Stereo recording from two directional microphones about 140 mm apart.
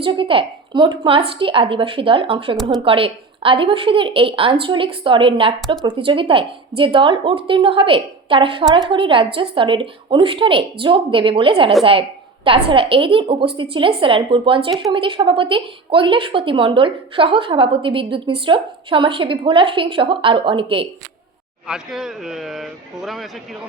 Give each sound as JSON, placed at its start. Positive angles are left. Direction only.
{"t": 0.0, "sound": "a woman's voice", "side_deg": -40}
{"t": 21.7, "sound": "speech", "side_deg": -5}